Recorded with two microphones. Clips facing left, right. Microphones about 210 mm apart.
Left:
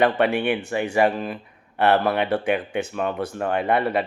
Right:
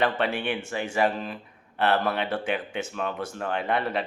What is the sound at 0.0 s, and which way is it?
Speech, 60° left (ahead or behind).